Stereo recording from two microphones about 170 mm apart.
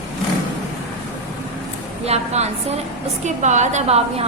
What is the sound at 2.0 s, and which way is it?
A woman's voice, 40° right (ahead or behind).